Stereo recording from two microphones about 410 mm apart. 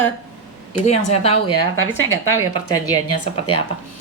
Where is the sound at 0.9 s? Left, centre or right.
Centre.